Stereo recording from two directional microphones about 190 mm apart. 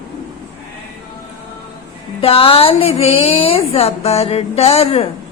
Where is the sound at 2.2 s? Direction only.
30° left (ahead or behind).